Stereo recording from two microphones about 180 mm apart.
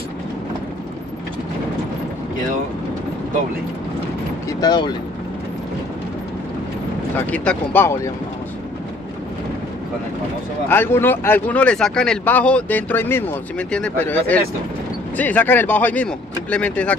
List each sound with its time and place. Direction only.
4.5 s speech: 20° left (ahead or behind)
7.2 s speech: 10° left (ahead or behind)
10.7 s speech: 10° left (ahead or behind)